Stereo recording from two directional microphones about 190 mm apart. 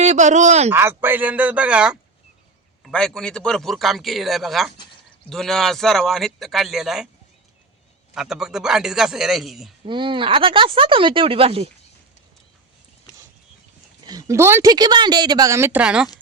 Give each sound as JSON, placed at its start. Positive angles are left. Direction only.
{"t": 0.0, "sound": "speech", "side_deg": -40}
{"t": 0.7, "sound": "a woman's voice", "side_deg": -10}
{"t": 8.1, "sound": "a man's voice", "side_deg": 0}
{"t": 9.8, "sound": "speech", "side_deg": -25}
{"t": 14.1, "sound": "a woman's voice", "side_deg": -15}